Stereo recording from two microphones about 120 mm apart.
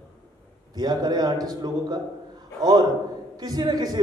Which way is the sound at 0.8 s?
35° right (ahead or behind).